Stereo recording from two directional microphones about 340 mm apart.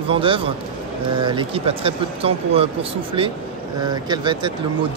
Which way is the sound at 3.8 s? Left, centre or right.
Centre.